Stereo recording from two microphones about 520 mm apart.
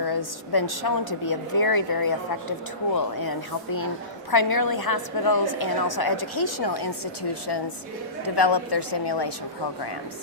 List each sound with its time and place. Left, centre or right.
0.0 s a woman's voice: left